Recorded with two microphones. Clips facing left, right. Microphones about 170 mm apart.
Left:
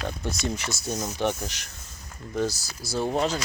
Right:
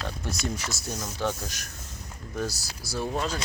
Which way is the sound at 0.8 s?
20° left (ahead or behind).